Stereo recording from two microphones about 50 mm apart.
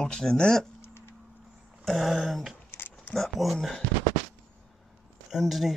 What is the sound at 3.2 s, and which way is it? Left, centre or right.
Speech, centre.